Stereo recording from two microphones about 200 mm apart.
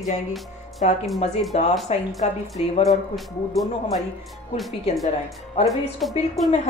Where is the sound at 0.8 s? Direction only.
35° left (ahead or behind).